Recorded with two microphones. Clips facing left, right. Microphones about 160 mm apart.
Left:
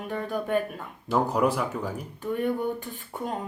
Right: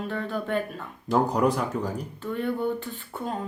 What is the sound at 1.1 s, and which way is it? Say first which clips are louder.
Speech: right 1 dB; 5° left (ahead or behind).